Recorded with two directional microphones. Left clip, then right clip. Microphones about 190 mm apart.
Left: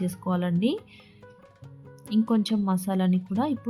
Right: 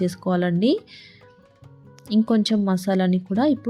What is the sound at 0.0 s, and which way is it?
Speech, 20° right (ahead or behind).